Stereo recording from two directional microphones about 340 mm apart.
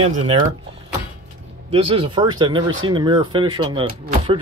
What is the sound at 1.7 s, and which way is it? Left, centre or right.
Speech, centre.